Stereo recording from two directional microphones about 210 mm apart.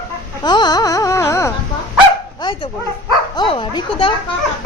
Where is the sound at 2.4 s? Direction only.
20° left (ahead or behind).